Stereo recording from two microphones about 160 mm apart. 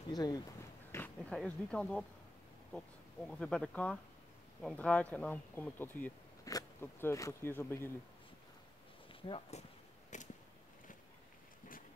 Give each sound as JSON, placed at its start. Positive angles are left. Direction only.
{"t": 0.1, "sound": "speech", "side_deg": 25}
{"t": 0.9, "sound": "speech", "side_deg": 10}
{"t": 3.3, "sound": "speech", "side_deg": 5}
{"t": 9.1, "sound": "speech", "side_deg": 40}
{"t": 10.1, "sound": "a sound", "side_deg": 50}